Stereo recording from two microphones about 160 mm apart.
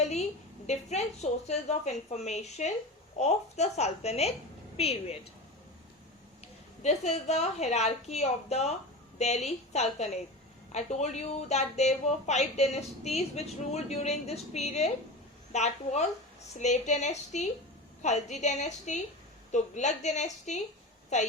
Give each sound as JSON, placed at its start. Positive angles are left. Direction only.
{"t": 0.0, "sound": "a sound", "side_deg": 45}
{"t": 0.7, "sound": "a woman's voice", "side_deg": 45}
{"t": 6.8, "sound": "a woman's voice", "side_deg": 45}